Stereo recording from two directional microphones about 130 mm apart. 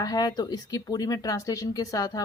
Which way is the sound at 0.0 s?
30° left (ahead or behind).